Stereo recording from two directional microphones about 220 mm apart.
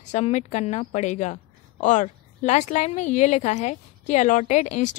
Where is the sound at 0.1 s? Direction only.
35° left (ahead or behind).